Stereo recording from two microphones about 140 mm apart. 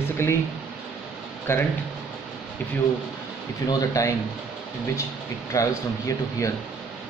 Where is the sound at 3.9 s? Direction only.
20° left (ahead or behind).